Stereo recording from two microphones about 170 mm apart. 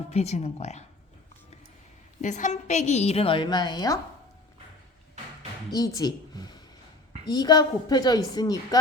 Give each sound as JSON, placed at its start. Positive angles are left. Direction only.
{"t": 0.1, "sound": "a woman's voice", "side_deg": 40}
{"t": 2.2, "sound": "a woman's voice", "side_deg": 45}
{"t": 5.7, "sound": "a woman's voice", "side_deg": 20}